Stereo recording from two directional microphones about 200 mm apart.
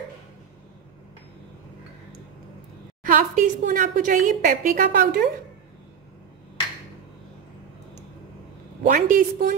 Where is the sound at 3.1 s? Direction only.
40° right (ahead or behind).